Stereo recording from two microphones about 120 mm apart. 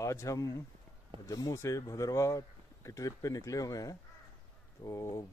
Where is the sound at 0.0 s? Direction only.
25° left (ahead or behind).